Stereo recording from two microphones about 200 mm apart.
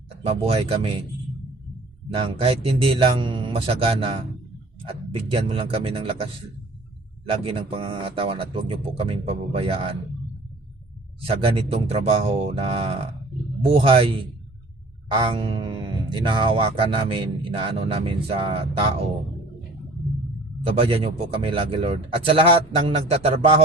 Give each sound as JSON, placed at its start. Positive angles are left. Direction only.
{"t": 0.4, "sound": "speech", "side_deg": -30}
{"t": 2.2, "sound": "speech", "side_deg": -30}
{"t": 7.3, "sound": "speech", "side_deg": -25}
{"t": 11.2, "sound": "speech", "side_deg": -25}
{"t": 20.7, "sound": "speech", "side_deg": -25}